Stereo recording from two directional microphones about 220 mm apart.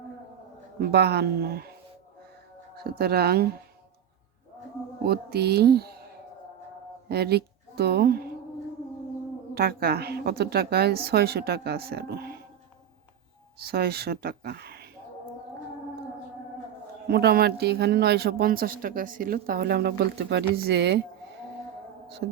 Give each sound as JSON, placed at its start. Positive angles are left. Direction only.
{"t": 0.8, "sound": "speech", "side_deg": -45}
{"t": 2.7, "sound": "speech", "side_deg": -45}
{"t": 5.0, "sound": "speech", "side_deg": -45}
{"t": 7.1, "sound": "a woman's voice", "side_deg": -45}
{"t": 9.6, "sound": "speech", "side_deg": -45}
{"t": 13.7, "sound": "speech", "side_deg": -45}
{"t": 17.1, "sound": "speech", "side_deg": -45}
{"t": 22.2, "sound": "speech", "side_deg": -55}